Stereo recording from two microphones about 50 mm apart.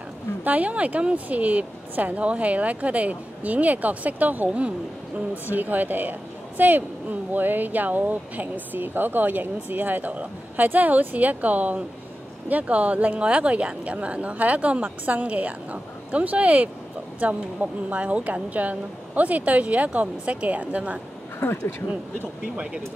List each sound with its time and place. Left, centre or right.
0.4 s speech: right
21.4 s speech: left